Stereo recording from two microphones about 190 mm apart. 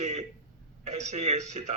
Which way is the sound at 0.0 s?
40° right (ahead or behind).